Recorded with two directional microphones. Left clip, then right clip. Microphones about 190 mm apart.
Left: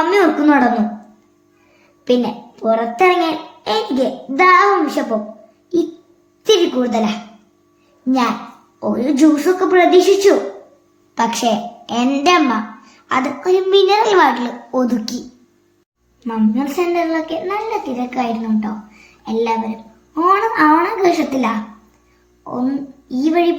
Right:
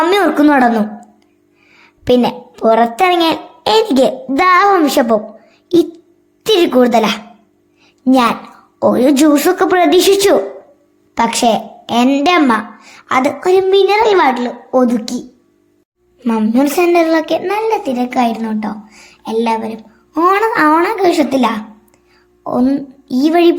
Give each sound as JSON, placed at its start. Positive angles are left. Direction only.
{"t": 0.0, "sound": "a sound", "side_deg": -45}
{"t": 2.0, "sound": "a child's voice", "side_deg": -45}
{"t": 6.4, "sound": "a child's voice", "side_deg": -50}
{"t": 8.8, "sound": "a child's voice", "side_deg": -50}
{"t": 11.1, "sound": "a woman's voice", "side_deg": -35}
{"t": 16.2, "sound": "a child's voice", "side_deg": -55}
{"t": 22.6, "sound": "a woman's voice", "side_deg": -55}